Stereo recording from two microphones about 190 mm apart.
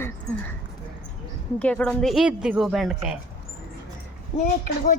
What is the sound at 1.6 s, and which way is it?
A woman's voice, 5° left (ahead or behind).